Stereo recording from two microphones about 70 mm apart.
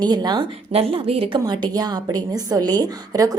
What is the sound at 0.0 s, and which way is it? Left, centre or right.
Speech, right.